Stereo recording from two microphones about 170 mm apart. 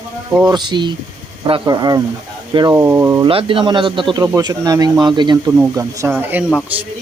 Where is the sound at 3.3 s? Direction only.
30° right (ahead or behind).